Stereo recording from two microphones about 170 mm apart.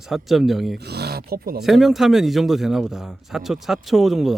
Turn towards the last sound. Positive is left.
turn(degrees=0)  # may be behind; listen again after turning